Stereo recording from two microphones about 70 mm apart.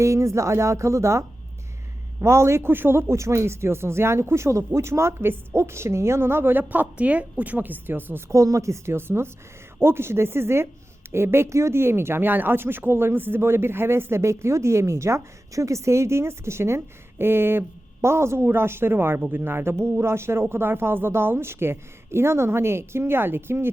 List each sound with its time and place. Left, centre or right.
0.0 s speech: right
2.2 s speech: right
8.3 s speech: right